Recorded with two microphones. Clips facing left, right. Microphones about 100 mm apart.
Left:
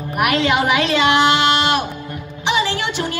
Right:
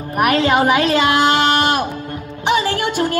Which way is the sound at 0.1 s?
40° right (ahead or behind).